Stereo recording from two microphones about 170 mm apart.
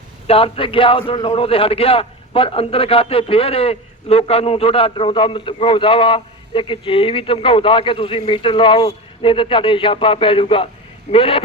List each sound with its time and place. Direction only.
0.3 s a man's voice: 35° left (ahead or behind)